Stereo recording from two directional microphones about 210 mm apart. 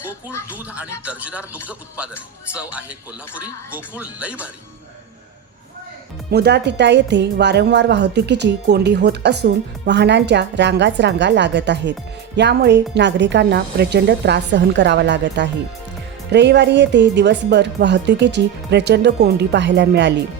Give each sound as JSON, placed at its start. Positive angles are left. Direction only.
{"t": 1.0, "sound": "speech", "side_deg": -5}
{"t": 2.5, "sound": "speech", "side_deg": -5}
{"t": 6.3, "sound": "a woman's voice", "side_deg": -50}